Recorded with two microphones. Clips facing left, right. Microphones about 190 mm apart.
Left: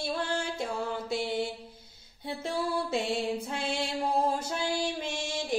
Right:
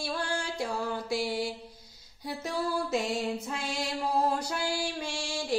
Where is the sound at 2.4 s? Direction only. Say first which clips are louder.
Even; 30° left (ahead or behind).